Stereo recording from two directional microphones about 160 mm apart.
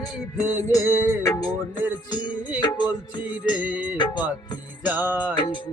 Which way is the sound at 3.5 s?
10° right (ahead or behind).